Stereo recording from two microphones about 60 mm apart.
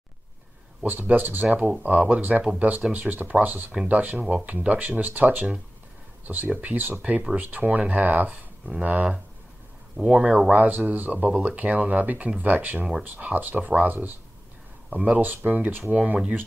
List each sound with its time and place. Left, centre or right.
0.8 s speech: right
2.9 s speech: right